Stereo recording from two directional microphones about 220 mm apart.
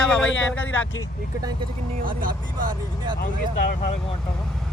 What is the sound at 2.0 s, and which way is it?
Speech, 40° right (ahead or behind).